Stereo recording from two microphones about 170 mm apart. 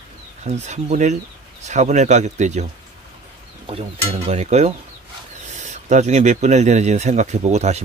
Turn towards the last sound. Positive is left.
turn(degrees=-40)  # may be behind; listen again after turning